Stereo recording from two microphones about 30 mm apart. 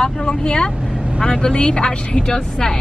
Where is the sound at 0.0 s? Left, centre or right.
Left.